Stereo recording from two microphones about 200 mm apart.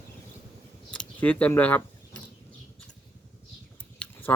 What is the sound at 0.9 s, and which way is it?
Speech, 5° left (ahead or behind).